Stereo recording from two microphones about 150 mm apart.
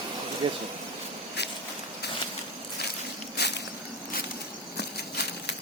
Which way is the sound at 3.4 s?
90° left.